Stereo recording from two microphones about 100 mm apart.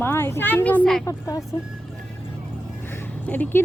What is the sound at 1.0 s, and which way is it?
Speech, 35° left (ahead or behind).